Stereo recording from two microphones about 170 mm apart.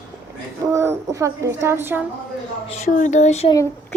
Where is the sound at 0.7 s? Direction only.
15° right (ahead or behind).